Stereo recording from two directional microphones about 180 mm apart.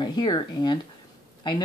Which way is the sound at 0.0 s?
25° left (ahead or behind).